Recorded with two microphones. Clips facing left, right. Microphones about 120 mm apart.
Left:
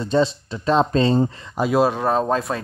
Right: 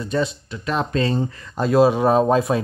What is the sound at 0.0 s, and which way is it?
Speech, 30° left (ahead or behind).